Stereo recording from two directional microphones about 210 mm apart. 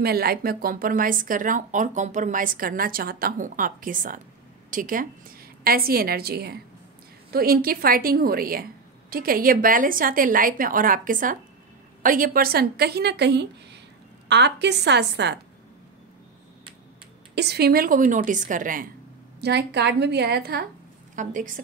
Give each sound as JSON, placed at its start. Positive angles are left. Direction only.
{"t": 0.0, "sound": "a woman's voice", "side_deg": -45}
{"t": 17.4, "sound": "speech", "side_deg": -50}
{"t": 19.4, "sound": "a woman's voice", "side_deg": -55}
{"t": 21.2, "sound": "speech", "side_deg": -35}